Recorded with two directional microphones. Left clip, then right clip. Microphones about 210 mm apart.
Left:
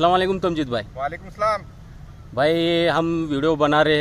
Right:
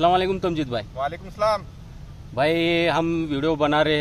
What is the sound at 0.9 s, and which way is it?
Speech, centre (ahead or behind).